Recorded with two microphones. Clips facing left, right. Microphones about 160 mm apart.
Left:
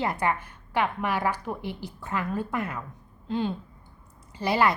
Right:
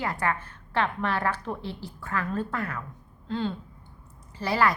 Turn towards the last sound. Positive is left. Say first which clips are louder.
# left 1 dB
turn(degrees=20)  # may be behind; listen again after turning